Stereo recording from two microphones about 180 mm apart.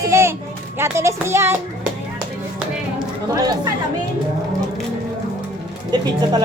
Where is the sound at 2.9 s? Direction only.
20° right (ahead or behind).